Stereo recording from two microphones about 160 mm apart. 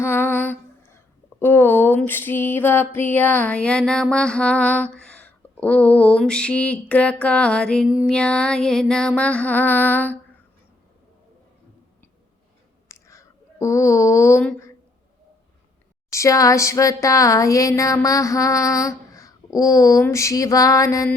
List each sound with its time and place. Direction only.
0.0 s speech: 15° left (ahead or behind)
8.0 s mantra: 5° left (ahead or behind)
12.9 s a sound: 20° left (ahead or behind)
16.1 s speech: 20° left (ahead or behind)